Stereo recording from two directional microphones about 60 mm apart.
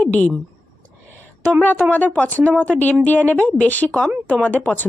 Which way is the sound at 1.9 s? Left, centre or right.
Left.